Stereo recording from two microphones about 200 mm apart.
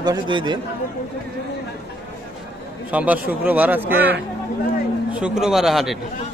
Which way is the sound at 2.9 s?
5° right (ahead or behind).